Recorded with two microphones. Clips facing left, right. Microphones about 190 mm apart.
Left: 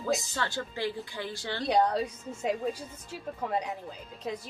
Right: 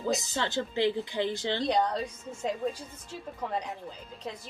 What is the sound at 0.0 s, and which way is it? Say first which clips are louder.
Speech: right 1 dB; 20° right (ahead or behind).